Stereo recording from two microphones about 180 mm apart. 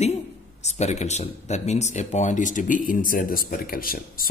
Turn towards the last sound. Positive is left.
turn(degrees=55)  # may be behind; listen again after turning